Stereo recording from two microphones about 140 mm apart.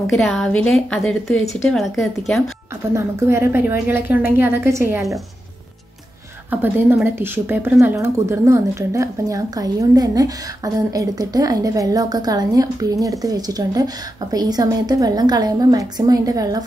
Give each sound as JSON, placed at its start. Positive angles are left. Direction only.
{"t": 0.1, "sound": "a woman's voice", "side_deg": 0}
{"t": 2.9, "sound": "a woman's voice", "side_deg": -20}
{"t": 6.5, "sound": "a woman's voice", "side_deg": -15}